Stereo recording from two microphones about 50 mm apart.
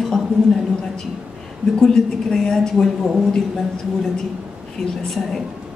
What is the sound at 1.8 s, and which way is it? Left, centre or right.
A woman's voice, centre.